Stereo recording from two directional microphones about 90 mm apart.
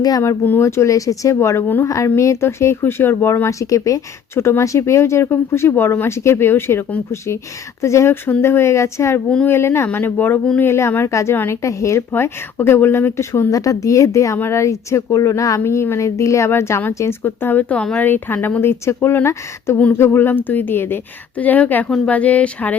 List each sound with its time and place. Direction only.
0.2 s speech: 25° left (ahead or behind)
0.6 s speech: 35° left (ahead or behind); by 21.8 s 20° left (ahead or behind)
21.8 s a woman's voice: 5° left (ahead or behind)
22.1 s speech: 15° left (ahead or behind)